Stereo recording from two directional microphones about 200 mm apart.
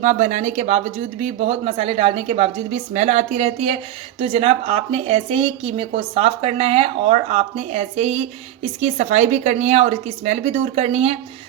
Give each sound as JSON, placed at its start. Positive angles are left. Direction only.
{"t": 0.0, "sound": "speech", "side_deg": -35}